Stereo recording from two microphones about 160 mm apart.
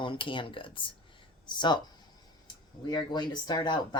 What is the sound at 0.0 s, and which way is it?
Speech, 30° left (ahead or behind).